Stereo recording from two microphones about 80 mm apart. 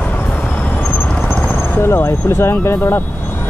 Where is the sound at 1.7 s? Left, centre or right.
Left.